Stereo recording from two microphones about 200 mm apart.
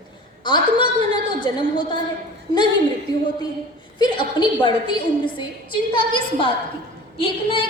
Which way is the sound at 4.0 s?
25° left (ahead or behind).